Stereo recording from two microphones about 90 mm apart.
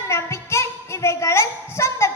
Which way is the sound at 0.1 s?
30° left (ahead or behind).